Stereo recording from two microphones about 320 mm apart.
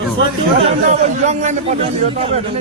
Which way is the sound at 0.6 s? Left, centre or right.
Right.